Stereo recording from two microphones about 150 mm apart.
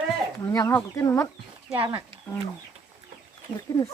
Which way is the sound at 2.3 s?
10° left (ahead or behind).